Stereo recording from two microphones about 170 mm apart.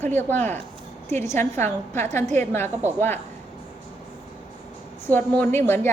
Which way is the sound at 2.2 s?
40° right (ahead or behind).